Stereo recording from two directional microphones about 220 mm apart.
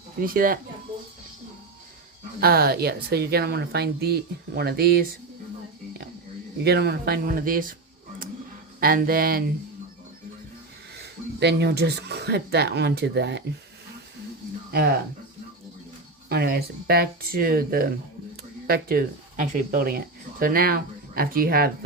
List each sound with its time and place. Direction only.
0.2 s speech: 40° right (ahead or behind)
2.4 s speech: 45° right (ahead or behind)
6.6 s speech: 45° right (ahead or behind)
8.8 s speech: 40° right (ahead or behind)
10.9 s speech: 50° right (ahead or behind)
16.3 s speech: 45° right (ahead or behind)